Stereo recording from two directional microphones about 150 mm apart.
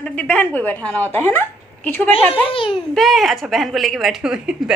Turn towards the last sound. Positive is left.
turn(degrees=-5)  # may be behind; listen again after turning